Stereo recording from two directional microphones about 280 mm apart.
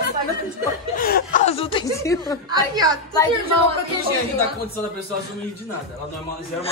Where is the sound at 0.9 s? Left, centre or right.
Left; by 2.3 s centre.